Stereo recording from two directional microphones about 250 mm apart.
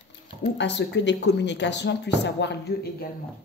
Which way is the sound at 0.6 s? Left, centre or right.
Left.